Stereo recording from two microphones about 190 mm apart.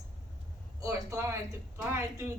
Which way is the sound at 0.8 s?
15° right (ahead or behind).